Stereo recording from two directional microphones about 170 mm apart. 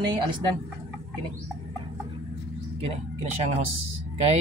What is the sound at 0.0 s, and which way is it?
Speech, 30° right (ahead or behind).